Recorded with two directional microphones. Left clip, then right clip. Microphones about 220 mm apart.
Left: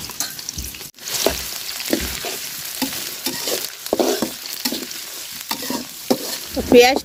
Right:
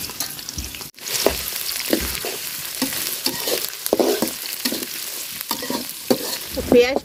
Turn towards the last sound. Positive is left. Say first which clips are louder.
# left 4 dB
turn(degrees=50)  # may be behind; listen again after turning